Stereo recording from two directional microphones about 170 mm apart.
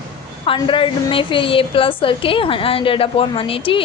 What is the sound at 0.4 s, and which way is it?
A woman's voice, 30° left (ahead or behind).